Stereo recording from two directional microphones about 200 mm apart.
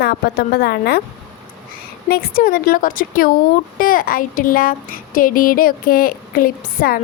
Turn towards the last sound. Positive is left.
turn(degrees=45)  # may be behind; listen again after turning